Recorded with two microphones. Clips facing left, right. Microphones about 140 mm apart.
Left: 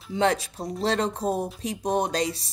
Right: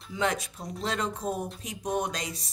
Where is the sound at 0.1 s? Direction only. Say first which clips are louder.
Left 6 dB; 30° left (ahead or behind).